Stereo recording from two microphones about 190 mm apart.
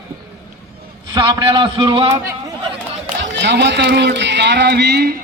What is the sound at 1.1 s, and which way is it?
A man's voice, 25° right (ahead or behind).